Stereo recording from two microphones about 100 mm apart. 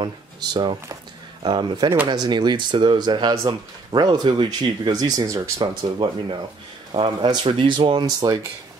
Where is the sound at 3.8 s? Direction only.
45° right (ahead or behind).